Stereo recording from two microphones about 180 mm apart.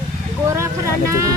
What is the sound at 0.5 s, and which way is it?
Speech, 15° right (ahead or behind).